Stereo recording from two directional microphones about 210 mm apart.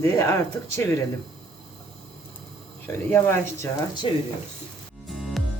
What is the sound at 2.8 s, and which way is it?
A man's voice, 10° left (ahead or behind).